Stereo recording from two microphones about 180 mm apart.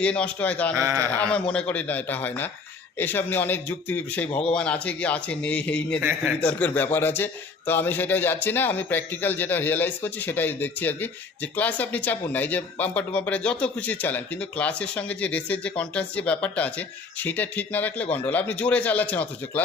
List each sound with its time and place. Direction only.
0.0 s speech: 5° left (ahead or behind)
0.8 s a man's voice: 15° right (ahead or behind)
1.2 s speech: 5° left (ahead or behind)
6.0 s a man's voice: 10° right (ahead or behind)
6.4 s speech: 10° left (ahead or behind)